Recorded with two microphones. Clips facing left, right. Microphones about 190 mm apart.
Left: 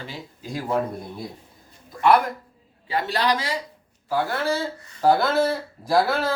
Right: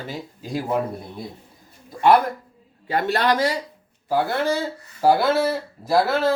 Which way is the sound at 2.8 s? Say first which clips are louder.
Right 3 dB; 50° right (ahead or behind).